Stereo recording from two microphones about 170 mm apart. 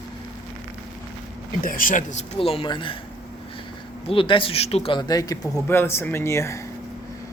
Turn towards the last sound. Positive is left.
turn(degrees=15)  # may be behind; listen again after turning